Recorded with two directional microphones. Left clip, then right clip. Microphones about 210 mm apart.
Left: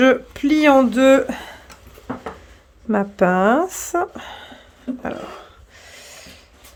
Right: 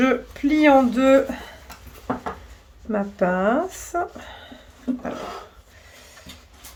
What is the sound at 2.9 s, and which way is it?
Speech, 50° left (ahead or behind).